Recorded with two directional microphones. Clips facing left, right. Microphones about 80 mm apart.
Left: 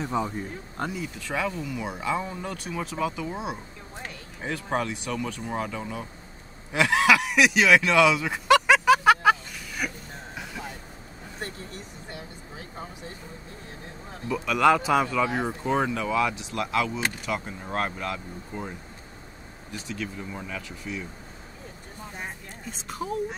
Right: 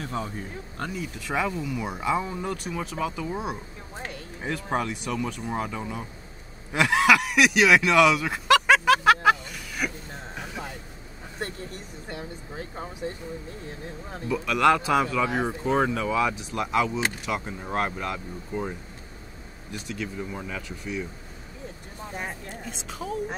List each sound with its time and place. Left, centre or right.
0.0 s speech: centre
1.2 s speech: centre
6.7 s a sound: centre
12.1 s speech: right
14.3 s speech: centre
19.7 s speech: centre
22.7 s speech: centre